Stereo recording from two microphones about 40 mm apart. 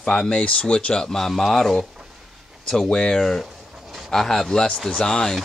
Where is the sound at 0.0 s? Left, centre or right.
Centre.